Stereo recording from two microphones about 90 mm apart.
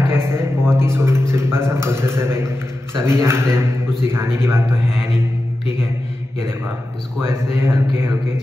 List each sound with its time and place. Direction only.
0.1 s a sound: 25° right (ahead or behind)
1.3 s a man's voice: 30° right (ahead or behind)
7.2 s a man's voice: 30° right (ahead or behind)